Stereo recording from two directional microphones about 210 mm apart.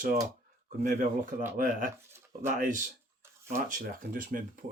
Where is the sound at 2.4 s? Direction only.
40° right (ahead or behind).